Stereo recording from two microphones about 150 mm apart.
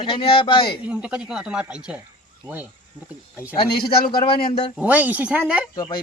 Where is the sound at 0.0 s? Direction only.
35° left (ahead or behind).